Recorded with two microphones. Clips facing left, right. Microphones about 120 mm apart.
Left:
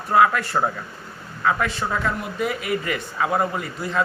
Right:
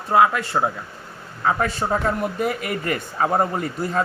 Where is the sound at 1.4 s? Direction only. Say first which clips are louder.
Right 1 dB; 35° right (ahead or behind).